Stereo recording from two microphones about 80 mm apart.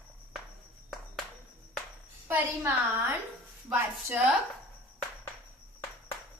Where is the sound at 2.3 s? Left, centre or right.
Right.